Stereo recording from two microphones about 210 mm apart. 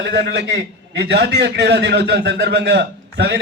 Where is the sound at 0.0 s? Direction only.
55° right (ahead or behind).